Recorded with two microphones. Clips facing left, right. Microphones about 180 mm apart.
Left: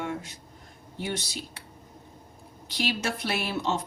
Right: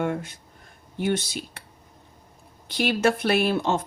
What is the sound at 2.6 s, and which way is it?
Speech, 55° right (ahead or behind).